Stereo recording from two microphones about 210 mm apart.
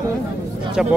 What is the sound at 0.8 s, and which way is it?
Speech, centre (ahead or behind).